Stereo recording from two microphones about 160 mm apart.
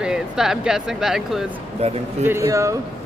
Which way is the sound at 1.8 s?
40° right (ahead or behind).